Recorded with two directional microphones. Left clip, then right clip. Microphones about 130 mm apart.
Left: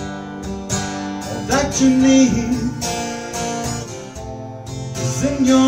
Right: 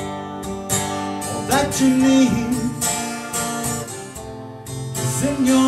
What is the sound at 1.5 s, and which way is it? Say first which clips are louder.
Music: left 2 dB; 5° right (ahead or behind).